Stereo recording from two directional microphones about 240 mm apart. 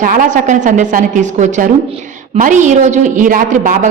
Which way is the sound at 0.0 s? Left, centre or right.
Right.